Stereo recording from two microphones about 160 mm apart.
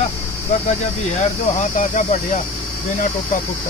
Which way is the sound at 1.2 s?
50° left (ahead or behind).